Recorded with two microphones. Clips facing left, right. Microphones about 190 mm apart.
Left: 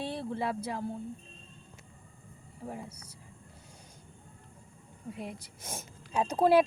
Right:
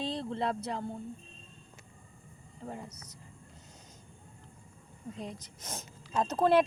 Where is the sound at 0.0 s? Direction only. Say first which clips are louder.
Right 1 dB; 10° left (ahead or behind).